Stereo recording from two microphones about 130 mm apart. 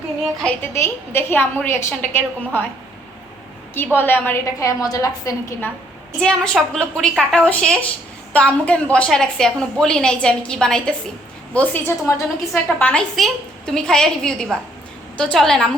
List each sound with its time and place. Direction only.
0.4 s a woman's voice: 15° left (ahead or behind)
3.8 s a woman's voice: 15° left (ahead or behind)
6.1 s a woman's voice: 5° left (ahead or behind); by 12.2 s 20° left (ahead or behind)
12.8 s a woman's voice: 10° left (ahead or behind)